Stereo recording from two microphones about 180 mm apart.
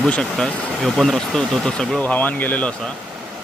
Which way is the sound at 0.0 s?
5° left (ahead or behind).